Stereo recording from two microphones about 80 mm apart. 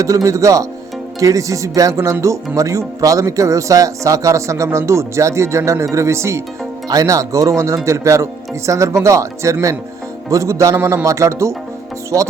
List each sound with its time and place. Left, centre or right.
0.0 s speech: right
6.8 s speech: right